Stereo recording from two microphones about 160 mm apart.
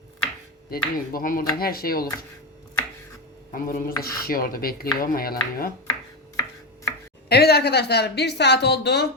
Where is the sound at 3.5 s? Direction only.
60° left (ahead or behind).